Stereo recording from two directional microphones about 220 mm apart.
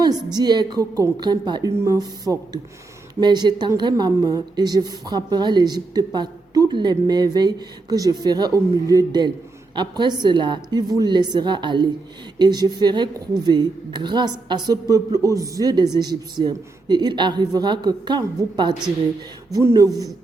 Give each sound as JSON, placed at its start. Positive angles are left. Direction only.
{"t": 0.0, "sound": "a woman's voice", "side_deg": -20}